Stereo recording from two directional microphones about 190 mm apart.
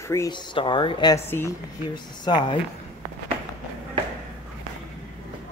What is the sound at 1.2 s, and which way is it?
Speech, 10° left (ahead or behind).